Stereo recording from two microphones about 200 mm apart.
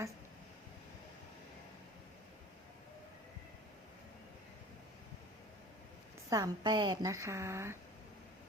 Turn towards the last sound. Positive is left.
turn(degrees=-15)  # may be behind; listen again after turning